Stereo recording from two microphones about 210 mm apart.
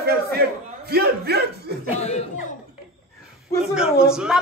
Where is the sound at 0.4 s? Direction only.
50° right (ahead or behind).